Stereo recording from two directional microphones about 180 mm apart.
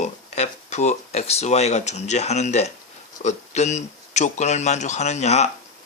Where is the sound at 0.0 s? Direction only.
40° left (ahead or behind).